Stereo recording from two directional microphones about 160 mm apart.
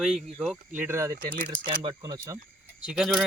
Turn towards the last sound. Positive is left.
turn(degrees=0)  # may be behind; listen again after turning